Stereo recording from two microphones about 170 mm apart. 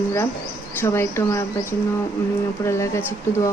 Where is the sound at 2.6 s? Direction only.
15° left (ahead or behind).